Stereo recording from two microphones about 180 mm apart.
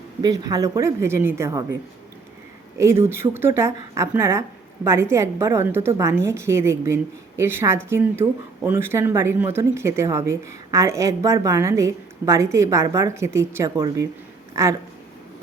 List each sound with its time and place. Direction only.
0.2 s speech: 20° right (ahead or behind)
2.7 s speech: 15° right (ahead or behind)